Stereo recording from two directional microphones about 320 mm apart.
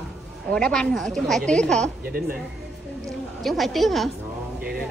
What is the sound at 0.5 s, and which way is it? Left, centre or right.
Speech, centre.